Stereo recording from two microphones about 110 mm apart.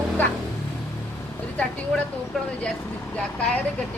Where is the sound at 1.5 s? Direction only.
10° left (ahead or behind).